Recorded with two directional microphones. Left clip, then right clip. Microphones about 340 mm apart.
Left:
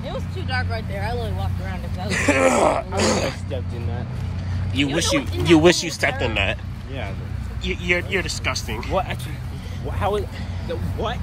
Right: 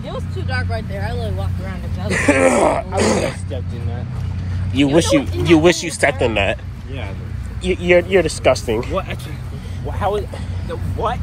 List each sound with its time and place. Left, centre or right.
0.0 s vehicle: right
2.1 s speech: centre
4.7 s speech: centre
10.0 s speech: right